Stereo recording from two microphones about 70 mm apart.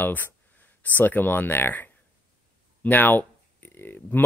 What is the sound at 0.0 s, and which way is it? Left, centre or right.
Speech, left.